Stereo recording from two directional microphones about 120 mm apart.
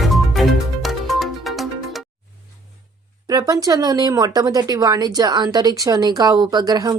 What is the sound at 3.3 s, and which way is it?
Speech, 30° right (ahead or behind).